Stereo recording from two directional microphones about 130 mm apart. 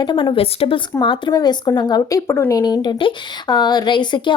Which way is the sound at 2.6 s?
30° left (ahead or behind).